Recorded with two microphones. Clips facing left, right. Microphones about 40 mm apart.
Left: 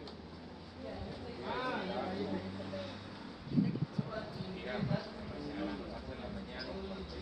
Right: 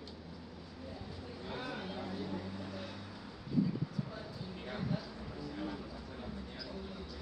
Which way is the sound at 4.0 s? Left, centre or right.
Centre.